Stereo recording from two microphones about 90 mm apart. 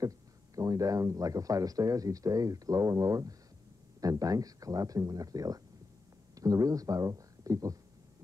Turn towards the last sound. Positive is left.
turn(degrees=-40)  # may be behind; listen again after turning